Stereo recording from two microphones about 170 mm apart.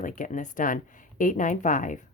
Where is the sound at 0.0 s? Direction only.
50° left (ahead or behind).